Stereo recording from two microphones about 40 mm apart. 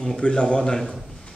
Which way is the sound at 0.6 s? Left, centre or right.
Centre.